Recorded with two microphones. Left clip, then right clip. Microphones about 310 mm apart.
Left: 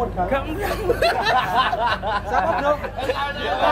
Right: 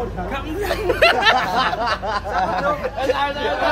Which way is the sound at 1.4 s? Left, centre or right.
Right.